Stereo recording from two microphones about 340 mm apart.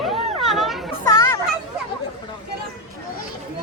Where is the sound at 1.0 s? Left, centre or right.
Centre.